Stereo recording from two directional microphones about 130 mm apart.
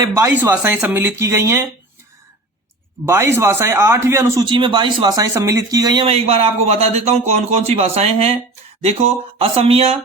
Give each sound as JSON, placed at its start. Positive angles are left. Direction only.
{"t": 0.0, "sound": "speech", "side_deg": -20}
{"t": 3.1, "sound": "speech", "side_deg": -20}
{"t": 4.4, "sound": "speech", "side_deg": -40}
{"t": 6.1, "sound": "speech", "side_deg": -50}